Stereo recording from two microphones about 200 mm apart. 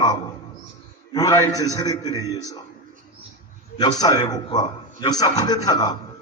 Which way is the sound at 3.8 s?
20° left (ahead or behind).